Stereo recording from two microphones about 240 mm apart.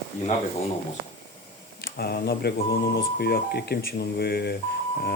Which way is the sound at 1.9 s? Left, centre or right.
Left.